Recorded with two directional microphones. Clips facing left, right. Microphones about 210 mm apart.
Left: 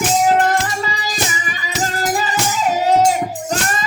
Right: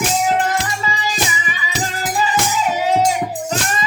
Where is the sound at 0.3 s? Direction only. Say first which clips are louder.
Left 3 dB; 40° left (ahead or behind).